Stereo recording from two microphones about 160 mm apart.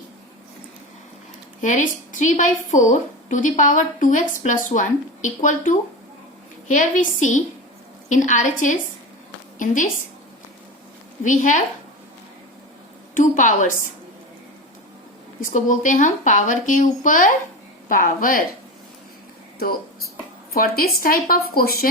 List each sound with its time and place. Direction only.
1.6 s a woman's voice: 50° left (ahead or behind)
11.2 s a woman's voice: 50° left (ahead or behind)
13.1 s a woman's voice: 55° left (ahead or behind)
15.4 s a woman's voice: 55° left (ahead or behind)
20.5 s a woman's voice: 70° left (ahead or behind)